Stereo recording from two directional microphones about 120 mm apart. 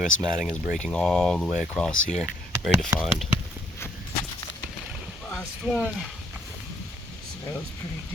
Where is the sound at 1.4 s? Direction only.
10° right (ahead or behind).